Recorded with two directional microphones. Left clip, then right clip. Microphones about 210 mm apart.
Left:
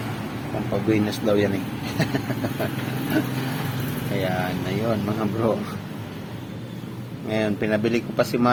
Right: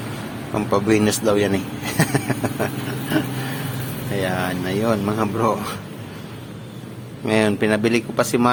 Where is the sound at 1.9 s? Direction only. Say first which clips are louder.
Right 5 dB; 20° right (ahead or behind).